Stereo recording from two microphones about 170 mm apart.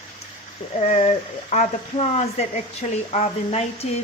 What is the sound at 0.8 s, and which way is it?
Speech, 45° left (ahead or behind).